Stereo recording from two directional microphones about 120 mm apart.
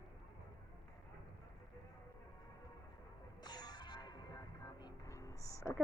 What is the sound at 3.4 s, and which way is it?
Music, 35° left (ahead or behind).